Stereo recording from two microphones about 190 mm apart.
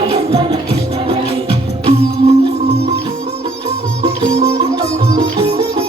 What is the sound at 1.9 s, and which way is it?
Music, 35° right (ahead or behind).